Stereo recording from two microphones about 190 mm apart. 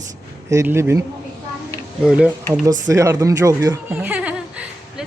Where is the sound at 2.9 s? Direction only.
15° right (ahead or behind).